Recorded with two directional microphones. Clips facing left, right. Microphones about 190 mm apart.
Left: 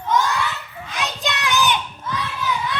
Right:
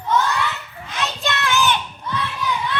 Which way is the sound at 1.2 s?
15° left (ahead or behind).